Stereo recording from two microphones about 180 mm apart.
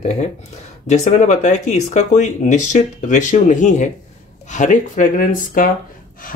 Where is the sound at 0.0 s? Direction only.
40° left (ahead or behind).